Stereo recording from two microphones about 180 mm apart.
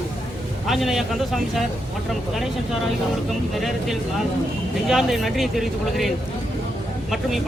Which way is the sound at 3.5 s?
Centre (ahead or behind).